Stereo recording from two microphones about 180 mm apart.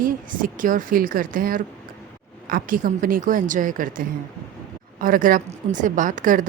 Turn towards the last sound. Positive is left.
turn(degrees=-45)  # may be behind; listen again after turning